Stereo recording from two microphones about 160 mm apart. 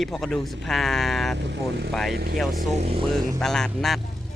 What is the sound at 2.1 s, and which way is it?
Speech, 70° right (ahead or behind).